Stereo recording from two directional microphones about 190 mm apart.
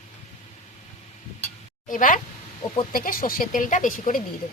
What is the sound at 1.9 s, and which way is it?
Speech, 45° left (ahead or behind).